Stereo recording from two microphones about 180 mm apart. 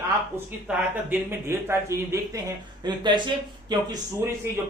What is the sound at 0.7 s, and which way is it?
Speech, 10° right (ahead or behind).